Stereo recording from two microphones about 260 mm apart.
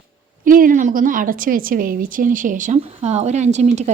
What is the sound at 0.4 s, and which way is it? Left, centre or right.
A woman's voice, right.